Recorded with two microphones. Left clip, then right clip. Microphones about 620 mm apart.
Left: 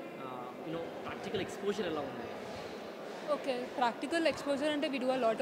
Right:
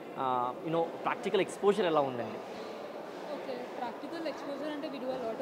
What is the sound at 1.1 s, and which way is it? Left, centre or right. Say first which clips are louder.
Speech: right 5 dB; right.